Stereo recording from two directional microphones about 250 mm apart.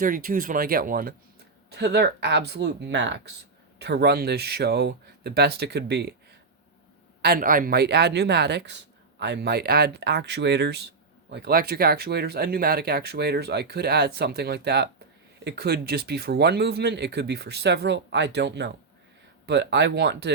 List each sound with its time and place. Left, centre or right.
0.0 s speech: right
7.2 s speech: right